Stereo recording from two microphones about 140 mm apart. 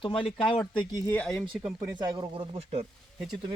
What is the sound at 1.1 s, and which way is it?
Speech, 5° left (ahead or behind).